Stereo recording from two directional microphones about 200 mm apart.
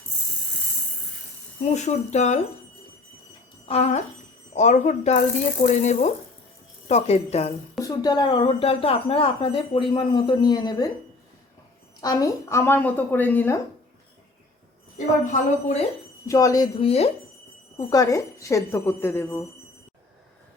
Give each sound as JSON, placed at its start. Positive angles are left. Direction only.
{"t": 1.7, "sound": "speech", "side_deg": 35}
{"t": 3.7, "sound": "speech", "side_deg": 30}
{"t": 7.8, "sound": "speech", "side_deg": 20}
{"t": 11.9, "sound": "a woman's voice", "side_deg": 20}
{"t": 14.9, "sound": "speech", "side_deg": 40}
{"t": 16.2, "sound": "a woman's voice", "side_deg": 15}
{"t": 16.8, "sound": "speech", "side_deg": 30}
{"t": 17.7, "sound": "a woman's voice", "side_deg": 20}